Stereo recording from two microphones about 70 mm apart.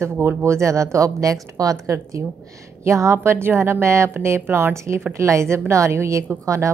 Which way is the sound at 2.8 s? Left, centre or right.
Right.